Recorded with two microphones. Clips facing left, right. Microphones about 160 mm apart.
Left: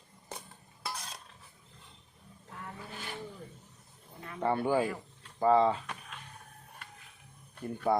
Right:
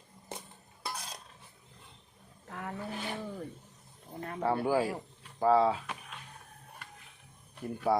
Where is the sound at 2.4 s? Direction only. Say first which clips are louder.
Right 5 dB; 60° right (ahead or behind).